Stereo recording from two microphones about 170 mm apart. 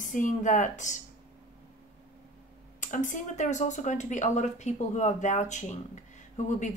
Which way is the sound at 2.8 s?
50° left (ahead or behind).